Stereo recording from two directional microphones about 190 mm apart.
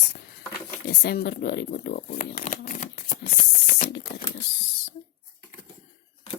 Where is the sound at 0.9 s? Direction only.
55° left (ahead or behind); by 3.0 s 40° left (ahead or behind).